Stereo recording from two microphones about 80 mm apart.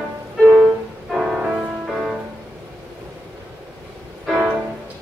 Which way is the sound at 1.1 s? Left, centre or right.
Centre.